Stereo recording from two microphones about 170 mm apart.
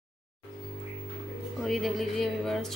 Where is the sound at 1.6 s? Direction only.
Centre (ahead or behind).